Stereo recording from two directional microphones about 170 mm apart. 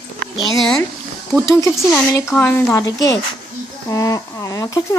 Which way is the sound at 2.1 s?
15° left (ahead or behind).